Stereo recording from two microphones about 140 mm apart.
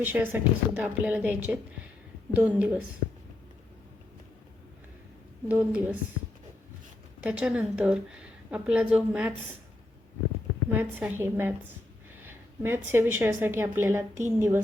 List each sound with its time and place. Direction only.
0.0 s a woman's voice: 15° right (ahead or behind)
5.5 s a woman's voice: 10° right (ahead or behind)
7.2 s a woman's voice: 10° right (ahead or behind)
10.8 s a woman's voice: 15° right (ahead or behind)